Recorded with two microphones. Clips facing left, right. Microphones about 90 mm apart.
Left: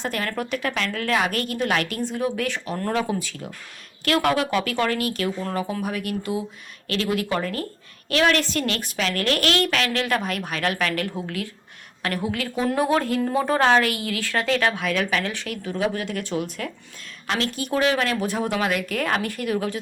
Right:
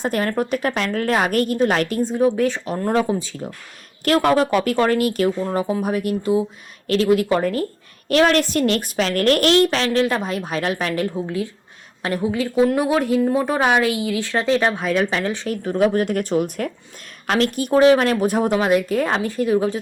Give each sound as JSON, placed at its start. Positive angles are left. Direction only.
{"t": 0.0, "sound": "a woman's voice", "side_deg": -40}
{"t": 12.6, "sound": "a woman's voice", "side_deg": -5}
{"t": 17.7, "sound": "a woman's voice", "side_deg": -35}